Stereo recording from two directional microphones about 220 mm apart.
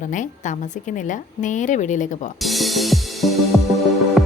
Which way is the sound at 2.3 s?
Centre (ahead or behind).